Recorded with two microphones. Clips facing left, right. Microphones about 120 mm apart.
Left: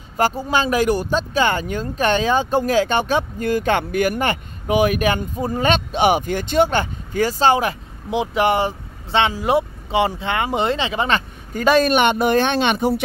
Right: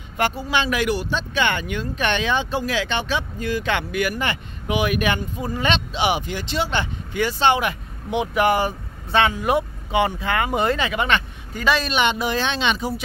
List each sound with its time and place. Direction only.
0.2 s speech: 40° left (ahead or behind); by 13.0 s 60° left (ahead or behind)